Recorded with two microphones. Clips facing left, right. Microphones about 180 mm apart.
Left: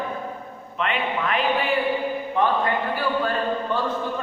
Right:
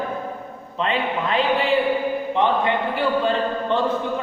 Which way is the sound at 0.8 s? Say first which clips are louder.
Right 2 dB; 30° right (ahead or behind).